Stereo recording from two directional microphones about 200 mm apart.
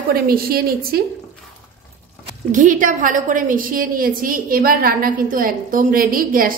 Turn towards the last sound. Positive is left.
turn(degrees=-45)  # may be behind; listen again after turning